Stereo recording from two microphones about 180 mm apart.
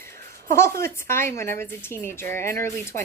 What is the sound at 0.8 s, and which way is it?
Speech, 15° left (ahead or behind).